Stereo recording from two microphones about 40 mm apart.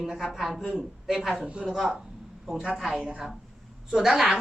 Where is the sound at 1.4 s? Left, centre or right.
Right.